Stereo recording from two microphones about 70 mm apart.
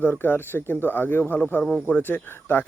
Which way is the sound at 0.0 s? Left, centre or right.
Left.